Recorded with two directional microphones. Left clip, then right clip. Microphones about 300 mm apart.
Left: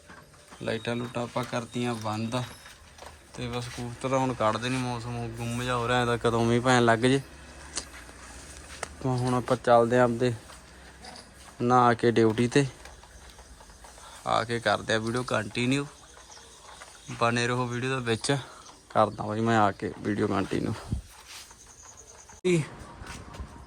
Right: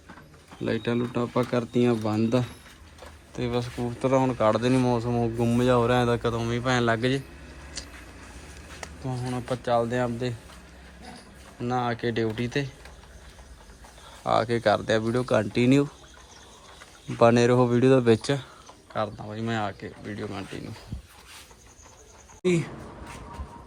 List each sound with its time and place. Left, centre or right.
0.6 s a man's voice: centre
7.8 s a sound: left
8.8 s speech: left
11.6 s speech: left
14.3 s a man's voice: centre
17.1 s a man's voice: centre
18.9 s speech: left
22.4 s a man's voice: centre